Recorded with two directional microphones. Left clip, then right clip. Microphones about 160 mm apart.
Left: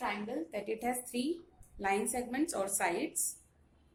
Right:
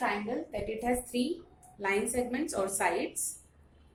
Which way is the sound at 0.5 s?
60° left (ahead or behind).